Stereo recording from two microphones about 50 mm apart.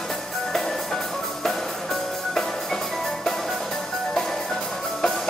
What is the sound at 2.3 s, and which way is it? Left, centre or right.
Music, centre.